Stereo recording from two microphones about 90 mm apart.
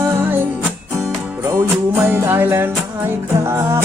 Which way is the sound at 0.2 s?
25° right (ahead or behind).